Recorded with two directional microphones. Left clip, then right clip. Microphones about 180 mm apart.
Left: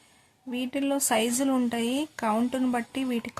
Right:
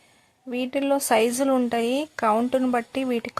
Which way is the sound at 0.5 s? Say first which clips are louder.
Right 5 dB; 20° right (ahead or behind).